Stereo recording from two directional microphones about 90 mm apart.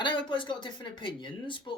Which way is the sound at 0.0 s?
65° left (ahead or behind).